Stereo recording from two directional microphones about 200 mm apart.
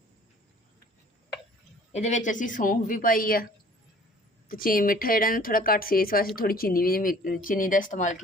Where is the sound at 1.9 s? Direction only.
35° left (ahead or behind).